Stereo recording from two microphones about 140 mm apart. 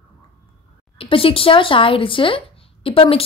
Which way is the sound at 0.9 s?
40° left (ahead or behind).